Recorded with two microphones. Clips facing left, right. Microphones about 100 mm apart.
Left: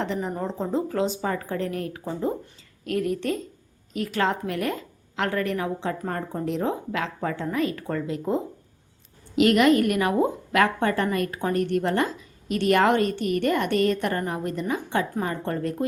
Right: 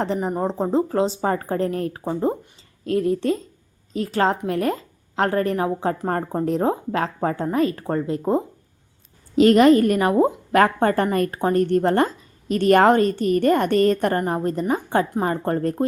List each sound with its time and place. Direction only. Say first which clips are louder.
0.0 s a woman's voice: right 5 dB; 35° right (ahead or behind)